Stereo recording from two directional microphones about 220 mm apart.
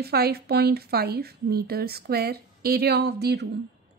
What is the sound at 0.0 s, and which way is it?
A woman's voice, 45° right (ahead or behind).